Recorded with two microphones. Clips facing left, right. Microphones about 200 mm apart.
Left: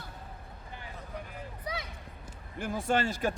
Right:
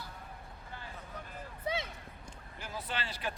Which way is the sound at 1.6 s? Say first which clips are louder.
Right 3 dB; 25° right (ahead or behind).